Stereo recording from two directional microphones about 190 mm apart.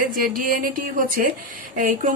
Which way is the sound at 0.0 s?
50° right (ahead or behind).